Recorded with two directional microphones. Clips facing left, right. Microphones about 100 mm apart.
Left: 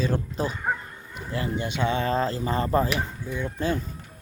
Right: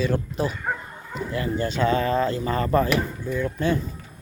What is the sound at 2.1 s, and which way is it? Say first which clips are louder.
Speech: right 2 dB; 30° left (ahead or behind).